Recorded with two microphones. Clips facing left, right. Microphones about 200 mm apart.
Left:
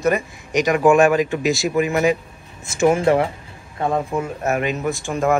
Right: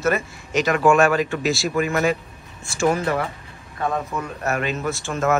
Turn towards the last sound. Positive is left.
turn(degrees=15)  # may be behind; listen again after turning